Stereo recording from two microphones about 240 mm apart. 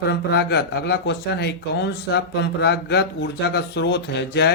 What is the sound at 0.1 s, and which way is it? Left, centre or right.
Speech, left.